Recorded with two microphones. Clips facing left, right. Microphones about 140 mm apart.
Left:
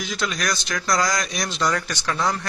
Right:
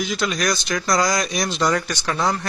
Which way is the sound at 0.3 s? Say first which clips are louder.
Right 4 dB; 15° right (ahead or behind).